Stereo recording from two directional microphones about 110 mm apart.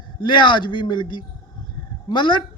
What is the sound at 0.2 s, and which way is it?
Speech, 45° left (ahead or behind).